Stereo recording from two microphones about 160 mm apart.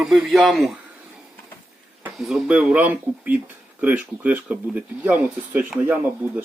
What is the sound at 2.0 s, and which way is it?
Speech, centre (ahead or behind).